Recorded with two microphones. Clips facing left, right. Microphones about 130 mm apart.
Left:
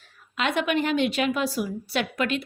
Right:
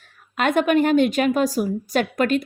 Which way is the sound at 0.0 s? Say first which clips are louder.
Right 5 dB; 50° right (ahead or behind).